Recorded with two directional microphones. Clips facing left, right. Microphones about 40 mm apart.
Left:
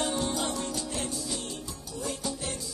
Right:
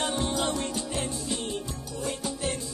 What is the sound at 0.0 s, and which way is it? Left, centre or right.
Music, right.